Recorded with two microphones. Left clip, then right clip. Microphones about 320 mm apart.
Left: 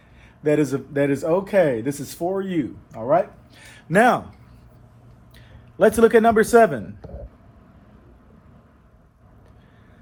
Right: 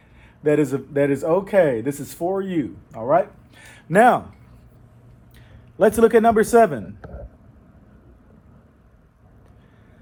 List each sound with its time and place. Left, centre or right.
0.4 s speech: right
3.7 s a sound: right
5.7 s speech: right